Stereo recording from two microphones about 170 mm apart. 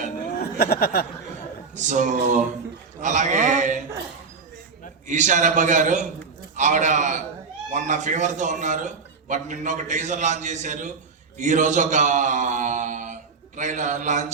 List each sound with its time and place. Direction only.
0.6 s speech: 65° left (ahead or behind)
1.7 s a man's voice: 45° right (ahead or behind)
5.0 s a man's voice: 45° right (ahead or behind)